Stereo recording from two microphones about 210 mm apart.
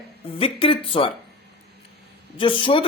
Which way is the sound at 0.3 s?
25° left (ahead or behind).